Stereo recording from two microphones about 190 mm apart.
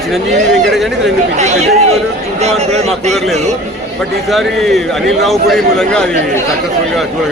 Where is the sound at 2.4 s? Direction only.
35° right (ahead or behind).